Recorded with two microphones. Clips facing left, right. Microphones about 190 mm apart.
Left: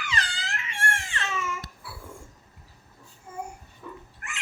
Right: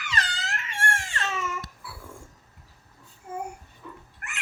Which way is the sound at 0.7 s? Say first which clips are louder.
Right 1 dB; 40° right (ahead or behind).